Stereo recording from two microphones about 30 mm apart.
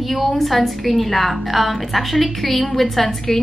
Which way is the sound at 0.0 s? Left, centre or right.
Centre.